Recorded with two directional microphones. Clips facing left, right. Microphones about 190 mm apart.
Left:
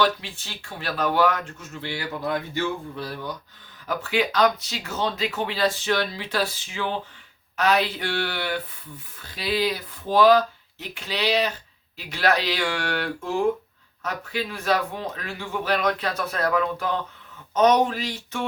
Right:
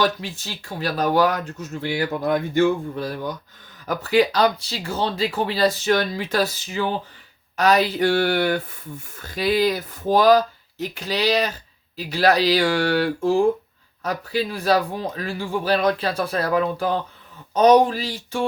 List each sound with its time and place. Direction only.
0.0 s speech: 40° right (ahead or behind)
3.8 s speech: 40° right (ahead or behind)